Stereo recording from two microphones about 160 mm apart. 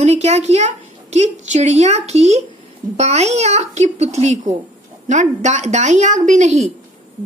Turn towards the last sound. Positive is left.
turn(degrees=-45)  # may be behind; listen again after turning